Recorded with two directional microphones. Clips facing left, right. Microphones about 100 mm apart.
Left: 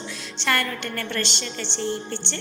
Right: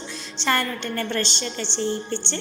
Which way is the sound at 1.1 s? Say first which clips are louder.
Right 2 dB; 35° right (ahead or behind).